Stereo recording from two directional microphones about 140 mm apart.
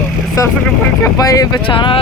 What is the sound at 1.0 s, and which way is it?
Speech, 25° left (ahead or behind).